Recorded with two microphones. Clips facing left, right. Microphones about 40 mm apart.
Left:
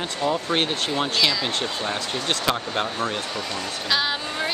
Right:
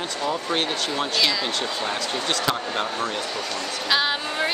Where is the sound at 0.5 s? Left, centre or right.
Left.